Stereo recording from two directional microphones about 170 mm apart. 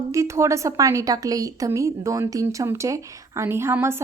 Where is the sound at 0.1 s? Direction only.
15° right (ahead or behind).